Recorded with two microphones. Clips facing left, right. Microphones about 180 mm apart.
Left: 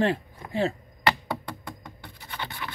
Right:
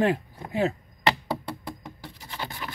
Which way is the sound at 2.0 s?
35° right (ahead or behind).